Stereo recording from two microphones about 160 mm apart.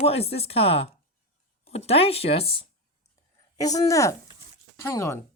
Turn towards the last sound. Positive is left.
turn(degrees=15)  # may be behind; listen again after turning